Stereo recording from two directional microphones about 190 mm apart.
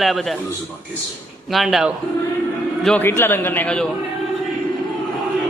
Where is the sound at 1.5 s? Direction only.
Centre (ahead or behind).